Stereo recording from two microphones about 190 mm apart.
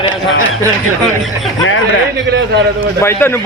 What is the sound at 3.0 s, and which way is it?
Speech, 10° left (ahead or behind).